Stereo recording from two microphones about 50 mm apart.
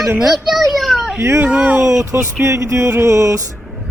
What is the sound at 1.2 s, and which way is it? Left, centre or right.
Music, right.